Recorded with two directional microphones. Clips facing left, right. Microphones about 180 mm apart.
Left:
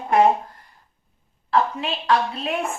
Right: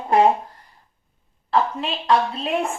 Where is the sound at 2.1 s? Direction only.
30° right (ahead or behind).